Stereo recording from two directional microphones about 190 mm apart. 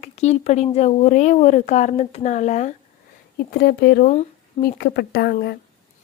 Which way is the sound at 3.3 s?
55° left (ahead or behind).